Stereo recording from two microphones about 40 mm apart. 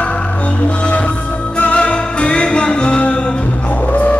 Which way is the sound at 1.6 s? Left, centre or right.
Left.